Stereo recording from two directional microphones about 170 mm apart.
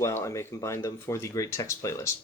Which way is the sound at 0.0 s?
20° left (ahead or behind).